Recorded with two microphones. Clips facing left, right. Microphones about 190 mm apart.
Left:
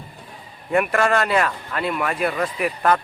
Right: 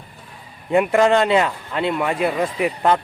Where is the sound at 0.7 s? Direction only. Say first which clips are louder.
Right 4 dB; 20° right (ahead or behind).